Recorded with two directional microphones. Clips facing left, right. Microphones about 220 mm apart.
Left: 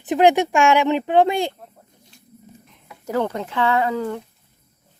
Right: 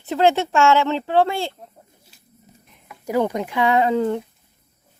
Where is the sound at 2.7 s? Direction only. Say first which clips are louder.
Right 2 dB; 10° right (ahead or behind).